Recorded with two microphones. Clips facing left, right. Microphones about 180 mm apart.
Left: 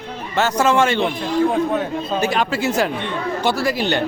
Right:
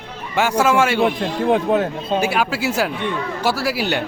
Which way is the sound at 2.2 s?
10° right (ahead or behind).